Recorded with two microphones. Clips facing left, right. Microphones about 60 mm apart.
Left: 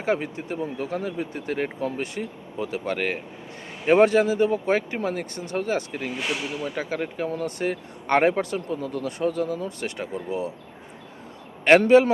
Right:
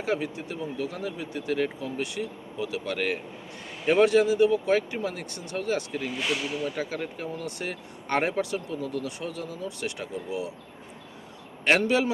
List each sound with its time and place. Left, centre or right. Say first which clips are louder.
0.0 s speech: left 3 dB; left
6.1 s speech: even; centre
6.6 s speech: left 2 dB; left
11.6 s speech: left 8 dB; left